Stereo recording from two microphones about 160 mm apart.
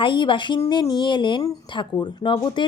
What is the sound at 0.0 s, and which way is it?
Speech, 30° left (ahead or behind).